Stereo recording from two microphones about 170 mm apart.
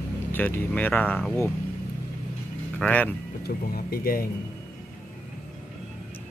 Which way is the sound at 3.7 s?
60° left (ahead or behind).